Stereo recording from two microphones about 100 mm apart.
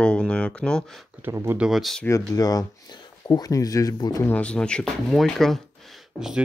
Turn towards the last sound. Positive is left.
turn(degrees=-5)  # may be behind; listen again after turning